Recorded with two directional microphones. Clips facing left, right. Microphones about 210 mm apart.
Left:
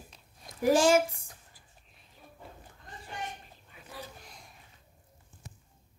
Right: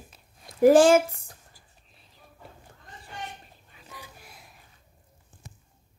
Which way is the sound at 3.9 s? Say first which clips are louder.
Left 2 dB; 10° right (ahead or behind).